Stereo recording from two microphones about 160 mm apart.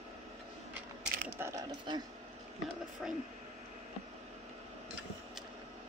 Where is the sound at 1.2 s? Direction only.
15° right (ahead or behind).